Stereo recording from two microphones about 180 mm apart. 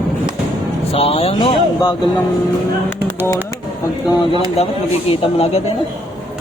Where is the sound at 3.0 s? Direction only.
15° left (ahead or behind).